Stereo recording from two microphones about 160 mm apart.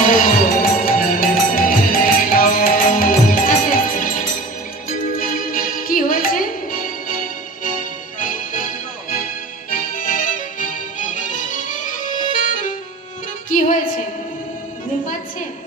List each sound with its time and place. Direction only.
0.1 s music: 60° left (ahead or behind)
9.7 s music: 60° left (ahead or behind)